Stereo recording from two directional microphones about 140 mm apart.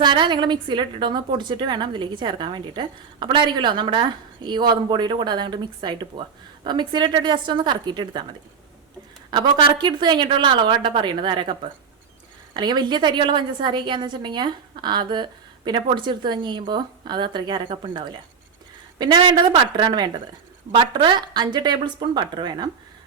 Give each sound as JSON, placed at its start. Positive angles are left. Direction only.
{"t": 0.0, "sound": "a woman's voice", "side_deg": -35}
{"t": 9.3, "sound": "a woman's voice", "side_deg": -35}